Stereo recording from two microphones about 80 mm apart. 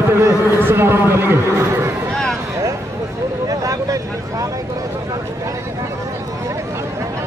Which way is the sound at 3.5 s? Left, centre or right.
Right.